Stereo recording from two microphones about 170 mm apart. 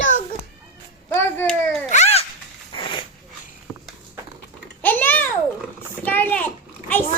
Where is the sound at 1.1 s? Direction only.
15° left (ahead or behind).